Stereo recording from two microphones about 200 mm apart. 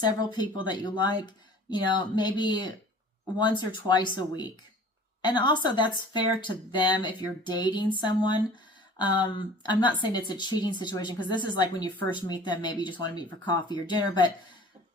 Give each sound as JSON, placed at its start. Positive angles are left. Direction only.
{"t": 0.0, "sound": "speech", "side_deg": 20}